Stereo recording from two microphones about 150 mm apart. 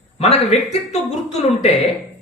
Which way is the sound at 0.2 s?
45° left (ahead or behind).